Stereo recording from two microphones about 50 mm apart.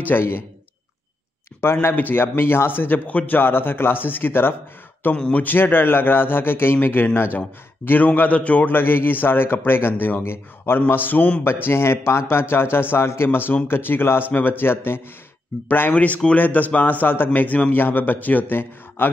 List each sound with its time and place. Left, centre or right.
0.1 s a man's voice: left
1.6 s speech: left
2.0 s a man's voice: left
3.1 s a man's voice: left
3.3 s a man's voice: left
5.1 s speech: left
5.4 s a man's voice: left
8.7 s a man's voice: left
11.4 s a man's voice: left
15.5 s speech: centre
15.9 s a man's voice: left